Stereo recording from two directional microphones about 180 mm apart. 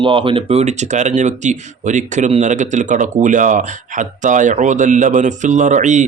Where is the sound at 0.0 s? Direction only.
30° right (ahead or behind).